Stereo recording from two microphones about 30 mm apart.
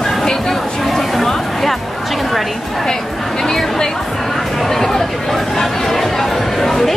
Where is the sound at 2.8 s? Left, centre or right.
Centre.